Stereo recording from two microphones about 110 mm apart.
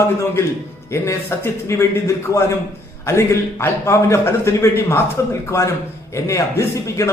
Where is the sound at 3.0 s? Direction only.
25° left (ahead or behind).